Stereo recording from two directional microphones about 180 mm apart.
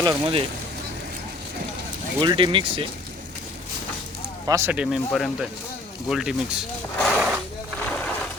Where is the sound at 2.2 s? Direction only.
25° right (ahead or behind).